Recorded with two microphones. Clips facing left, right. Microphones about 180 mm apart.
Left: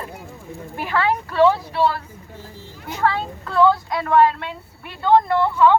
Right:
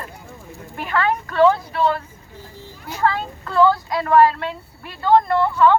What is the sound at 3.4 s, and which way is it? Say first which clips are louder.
Speech: even; centre (ahead or behind).